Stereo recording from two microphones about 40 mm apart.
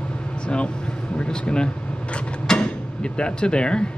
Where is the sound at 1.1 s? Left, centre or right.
Left.